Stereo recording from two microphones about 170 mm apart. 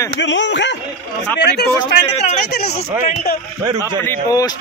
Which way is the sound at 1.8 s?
35° left (ahead or behind).